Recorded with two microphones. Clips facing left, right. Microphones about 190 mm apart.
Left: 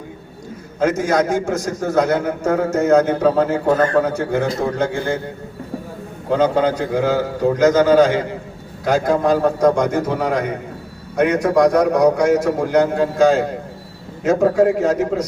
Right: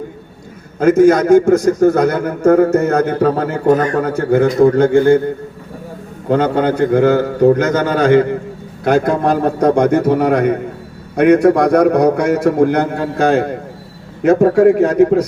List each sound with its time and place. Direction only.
0.8 s a man's voice: 60° right (ahead or behind)
6.2 s a man's voice: 60° right (ahead or behind)